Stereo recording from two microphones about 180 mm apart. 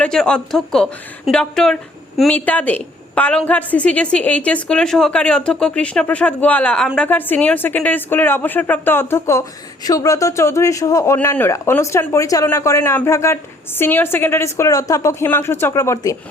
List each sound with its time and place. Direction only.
0.0 s a woman's voice: 5° left (ahead or behind)